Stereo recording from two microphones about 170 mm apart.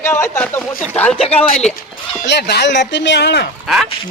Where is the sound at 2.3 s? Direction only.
75° left (ahead or behind).